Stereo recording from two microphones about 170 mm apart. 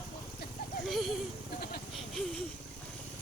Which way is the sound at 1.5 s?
70° left (ahead or behind).